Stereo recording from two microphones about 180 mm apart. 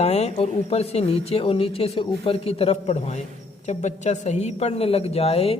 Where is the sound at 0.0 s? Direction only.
35° left (ahead or behind).